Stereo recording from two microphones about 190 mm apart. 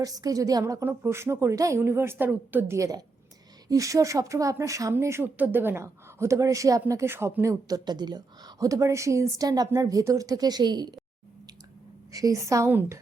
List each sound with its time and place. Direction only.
0.0 s speech: 20° right (ahead or behind)
12.1 s speech: 15° right (ahead or behind)